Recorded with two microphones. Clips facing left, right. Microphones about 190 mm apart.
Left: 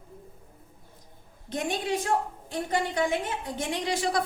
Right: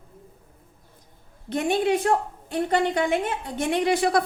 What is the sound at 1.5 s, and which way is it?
A woman's voice, 60° right (ahead or behind).